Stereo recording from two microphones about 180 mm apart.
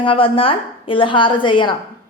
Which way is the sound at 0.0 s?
30° left (ahead or behind).